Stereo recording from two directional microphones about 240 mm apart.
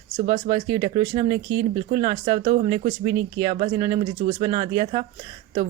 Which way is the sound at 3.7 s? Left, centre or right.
Centre.